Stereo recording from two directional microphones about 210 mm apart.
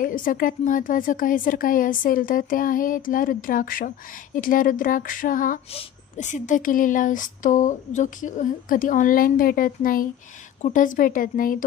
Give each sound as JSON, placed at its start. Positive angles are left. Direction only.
{"t": 0.0, "sound": "speech", "side_deg": 40}